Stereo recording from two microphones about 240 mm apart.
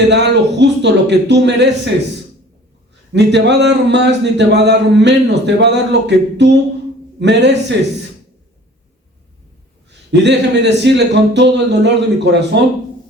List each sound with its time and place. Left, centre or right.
0.1 s a man's voice: right
3.1 s speech: right
10.1 s speech: right